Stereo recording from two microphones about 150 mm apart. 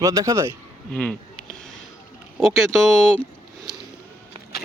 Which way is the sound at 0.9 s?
5° left (ahead or behind).